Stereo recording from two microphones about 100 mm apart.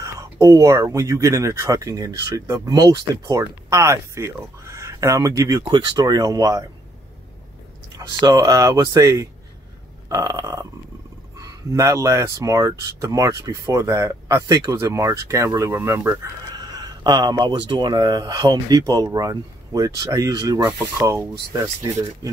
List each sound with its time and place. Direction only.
0.0 s speech: 35° right (ahead or behind)
5.7 s speech: 45° right (ahead or behind)
8.2 s speech: 45° right (ahead or behind); by 16.3 s 25° right (ahead or behind)
16.5 s speech: 40° right (ahead or behind)